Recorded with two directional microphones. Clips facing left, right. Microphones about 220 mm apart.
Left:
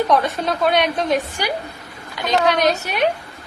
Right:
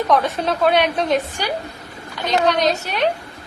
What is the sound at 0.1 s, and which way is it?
A woman's voice, centre (ahead or behind).